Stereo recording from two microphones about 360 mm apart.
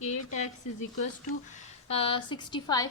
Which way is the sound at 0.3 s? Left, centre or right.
Centre.